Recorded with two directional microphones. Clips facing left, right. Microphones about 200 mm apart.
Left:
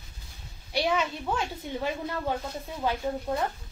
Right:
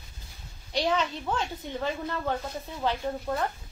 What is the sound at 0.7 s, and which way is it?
A woman's voice, 10° left (ahead or behind).